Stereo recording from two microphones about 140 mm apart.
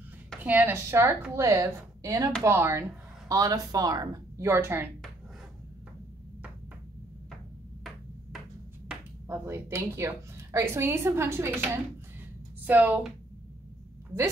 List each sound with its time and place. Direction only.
0.4 s a woman's voice: 10° right (ahead or behind)
8.8 s a woman's voice: 15° right (ahead or behind)